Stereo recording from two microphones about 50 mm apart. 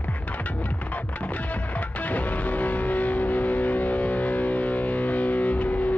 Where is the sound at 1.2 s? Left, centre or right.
Left.